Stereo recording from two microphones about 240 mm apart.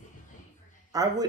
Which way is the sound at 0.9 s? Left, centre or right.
Centre.